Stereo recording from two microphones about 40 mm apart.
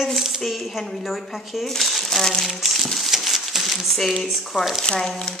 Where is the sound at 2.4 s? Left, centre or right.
Centre.